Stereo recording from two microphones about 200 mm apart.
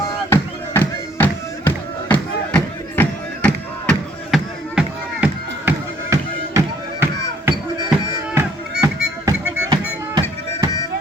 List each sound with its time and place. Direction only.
0.3 s music: 10° left (ahead or behind)
8.8 s music: 15° right (ahead or behind)